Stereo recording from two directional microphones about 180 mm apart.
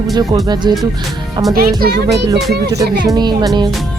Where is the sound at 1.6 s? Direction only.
55° right (ahead or behind).